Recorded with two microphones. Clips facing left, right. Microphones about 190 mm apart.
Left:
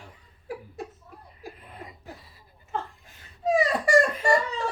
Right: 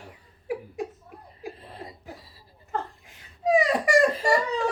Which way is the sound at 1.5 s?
30° right (ahead or behind).